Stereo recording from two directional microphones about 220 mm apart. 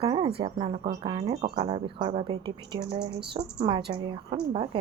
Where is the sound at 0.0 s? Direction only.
30° right (ahead or behind).